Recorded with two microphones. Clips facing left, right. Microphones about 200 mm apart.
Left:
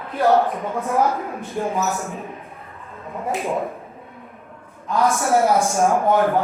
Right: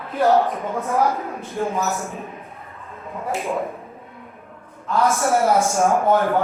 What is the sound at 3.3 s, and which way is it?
Speech, 15° left (ahead or behind).